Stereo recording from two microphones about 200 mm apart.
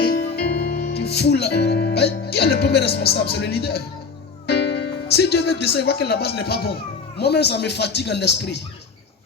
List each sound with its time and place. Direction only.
0.0 s music: 50° left (ahead or behind)
3.3 s speech: 55° left (ahead or behind)